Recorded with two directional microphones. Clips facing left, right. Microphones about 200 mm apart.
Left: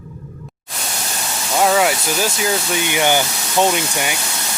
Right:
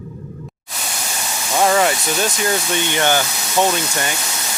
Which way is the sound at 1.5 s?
5° left (ahead or behind).